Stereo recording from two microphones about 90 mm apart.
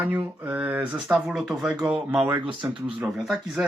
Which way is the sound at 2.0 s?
20° right (ahead or behind).